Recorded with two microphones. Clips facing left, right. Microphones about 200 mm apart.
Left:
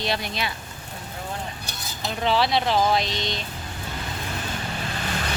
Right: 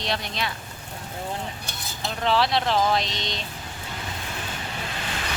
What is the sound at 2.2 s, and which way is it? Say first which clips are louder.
Speech: left 1 dB; centre (ahead or behind).